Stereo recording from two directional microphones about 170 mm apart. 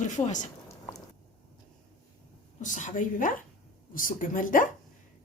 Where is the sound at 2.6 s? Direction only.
45° left (ahead or behind).